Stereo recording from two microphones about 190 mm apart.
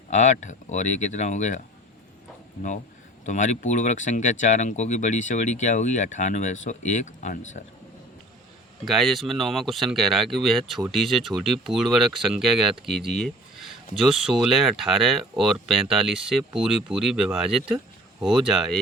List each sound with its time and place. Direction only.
0.1 s speech: 40° left (ahead or behind)
3.2 s speech: 40° left (ahead or behind)
8.8 s speech: centre (ahead or behind)